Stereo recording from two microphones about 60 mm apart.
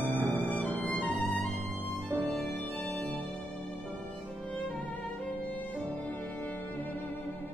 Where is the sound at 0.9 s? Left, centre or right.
Centre.